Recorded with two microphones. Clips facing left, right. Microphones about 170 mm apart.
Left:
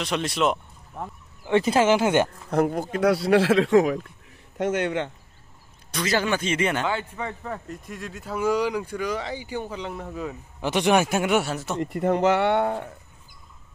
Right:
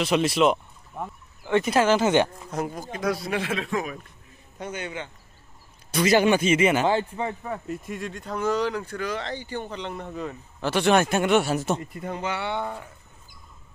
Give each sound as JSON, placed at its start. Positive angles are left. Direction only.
{"t": 0.0, "sound": "speech", "side_deg": -5}
{"t": 1.5, "sound": "speech", "side_deg": 25}
{"t": 2.0, "sound": "speech", "side_deg": 10}
{"t": 2.5, "sound": "speech", "side_deg": 60}
{"t": 5.9, "sound": "a man's voice", "side_deg": -10}
{"t": 6.4, "sound": "speech", "side_deg": -5}
{"t": 10.6, "sound": "speech", "side_deg": 15}
{"t": 11.8, "sound": "speech", "side_deg": 75}